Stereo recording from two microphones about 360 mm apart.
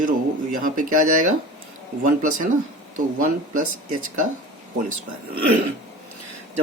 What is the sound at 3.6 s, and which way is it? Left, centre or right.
Speech, right.